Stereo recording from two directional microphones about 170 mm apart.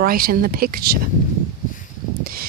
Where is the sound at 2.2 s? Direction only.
60° right (ahead or behind).